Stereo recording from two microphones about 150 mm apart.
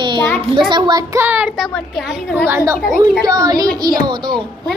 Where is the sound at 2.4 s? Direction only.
15° right (ahead or behind).